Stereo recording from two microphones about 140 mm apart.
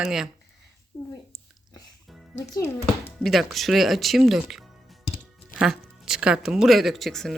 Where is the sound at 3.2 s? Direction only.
Centre (ahead or behind).